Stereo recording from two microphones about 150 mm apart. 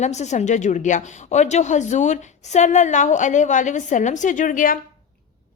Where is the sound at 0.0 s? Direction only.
50° left (ahead or behind).